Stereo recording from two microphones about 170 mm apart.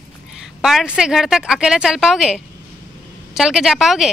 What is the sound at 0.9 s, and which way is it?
A woman's voice, 5° right (ahead or behind).